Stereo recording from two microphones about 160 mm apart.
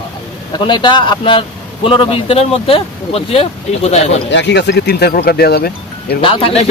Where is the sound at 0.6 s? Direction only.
30° left (ahead or behind).